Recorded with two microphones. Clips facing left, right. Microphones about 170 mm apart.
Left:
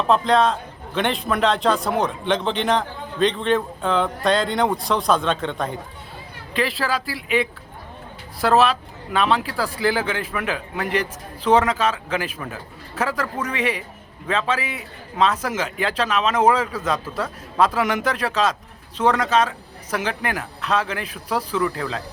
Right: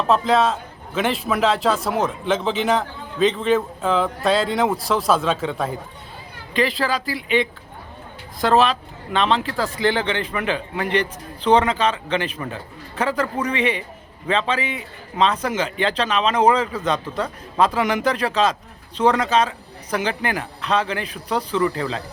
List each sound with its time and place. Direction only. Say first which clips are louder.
0.1 s a man's voice: even; 5° right (ahead or behind)